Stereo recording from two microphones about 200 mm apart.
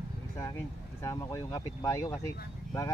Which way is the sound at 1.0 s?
15° left (ahead or behind).